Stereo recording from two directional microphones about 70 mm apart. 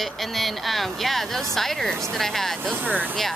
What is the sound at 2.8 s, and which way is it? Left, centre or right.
Speech, right.